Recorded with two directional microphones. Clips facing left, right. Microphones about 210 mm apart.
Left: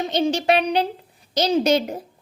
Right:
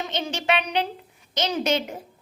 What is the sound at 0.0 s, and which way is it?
A woman's voice, 35° left (ahead or behind).